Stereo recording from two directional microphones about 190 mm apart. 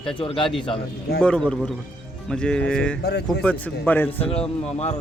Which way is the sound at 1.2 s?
5° left (ahead or behind).